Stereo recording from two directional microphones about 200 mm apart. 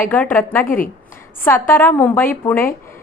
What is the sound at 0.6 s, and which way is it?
Speech, 45° left (ahead or behind).